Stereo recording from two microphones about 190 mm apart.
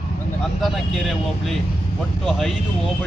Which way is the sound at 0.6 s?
Centre (ahead or behind).